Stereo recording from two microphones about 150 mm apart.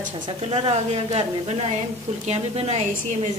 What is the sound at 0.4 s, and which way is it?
A woman's voice, 40° right (ahead or behind).